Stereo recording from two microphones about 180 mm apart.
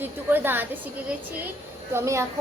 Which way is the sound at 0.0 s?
10° right (ahead or behind).